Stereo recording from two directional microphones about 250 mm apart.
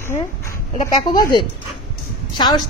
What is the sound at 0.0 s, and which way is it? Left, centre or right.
Speech, centre.